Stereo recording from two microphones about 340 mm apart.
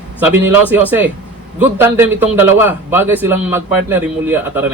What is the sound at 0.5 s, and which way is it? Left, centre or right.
A man's voice, centre.